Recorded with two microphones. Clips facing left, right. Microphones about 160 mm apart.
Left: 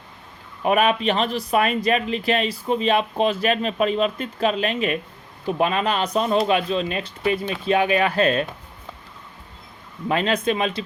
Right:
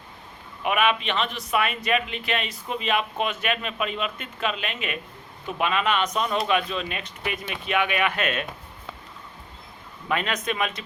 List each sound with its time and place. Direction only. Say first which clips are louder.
0.6 s speech: left 5 dB; 35° left (ahead or behind)
10.1 s speech: left 6 dB; 30° left (ahead or behind)